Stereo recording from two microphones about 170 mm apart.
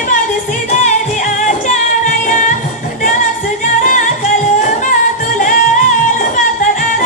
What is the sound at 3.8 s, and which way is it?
Music, 45° left (ahead or behind).